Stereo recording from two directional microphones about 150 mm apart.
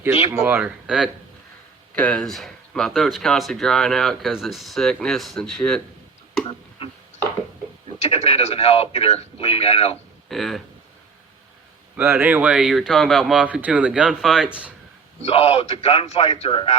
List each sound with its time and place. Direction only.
0.4 s speech: 10° right (ahead or behind)
2.0 s speech: 10° left (ahead or behind)
6.8 s a sound: 35° left (ahead or behind)
8.0 s a man's voice: 40° left (ahead or behind)
10.2 s speech: centre (ahead or behind)
11.9 s speech: 15° right (ahead or behind)
15.2 s a man's voice: 40° left (ahead or behind)